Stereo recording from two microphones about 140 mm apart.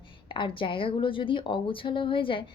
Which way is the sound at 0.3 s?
35° left (ahead or behind).